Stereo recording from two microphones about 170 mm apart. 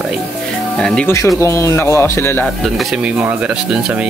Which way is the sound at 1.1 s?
15° left (ahead or behind).